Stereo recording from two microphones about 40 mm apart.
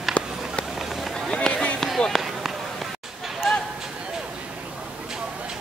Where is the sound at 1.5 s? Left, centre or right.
Left.